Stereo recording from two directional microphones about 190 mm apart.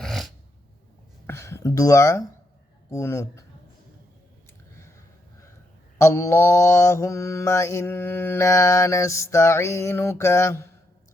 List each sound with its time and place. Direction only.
0.0 s a sound: centre (ahead or behind)
1.3 s speech: 15° left (ahead or behind)
2.9 s mantra: 15° left (ahead or behind)
6.0 s mantra: 15° left (ahead or behind)